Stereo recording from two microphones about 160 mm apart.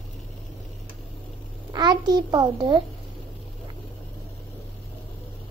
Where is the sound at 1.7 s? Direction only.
25° right (ahead or behind).